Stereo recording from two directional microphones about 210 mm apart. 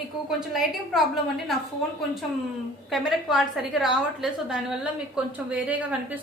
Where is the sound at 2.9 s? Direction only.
Centre (ahead or behind).